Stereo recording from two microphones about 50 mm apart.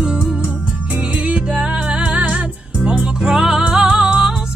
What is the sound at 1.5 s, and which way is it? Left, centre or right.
Music, centre.